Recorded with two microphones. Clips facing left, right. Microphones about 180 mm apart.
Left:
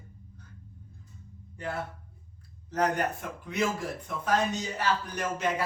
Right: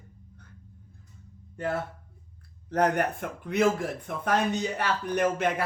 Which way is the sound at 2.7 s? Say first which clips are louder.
Right 3 dB; 60° right (ahead or behind).